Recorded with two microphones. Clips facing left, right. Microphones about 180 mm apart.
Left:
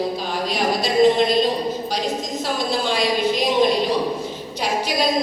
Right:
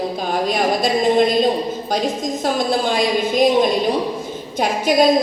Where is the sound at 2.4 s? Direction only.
50° right (ahead or behind).